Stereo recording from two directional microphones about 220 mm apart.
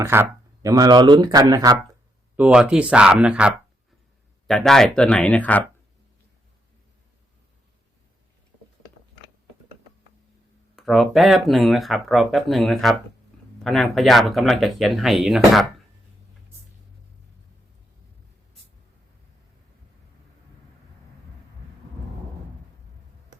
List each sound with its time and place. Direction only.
0.0 s speech: 10° right (ahead or behind)
2.3 s speech: 5° right (ahead or behind)
10.8 s speech: centre (ahead or behind)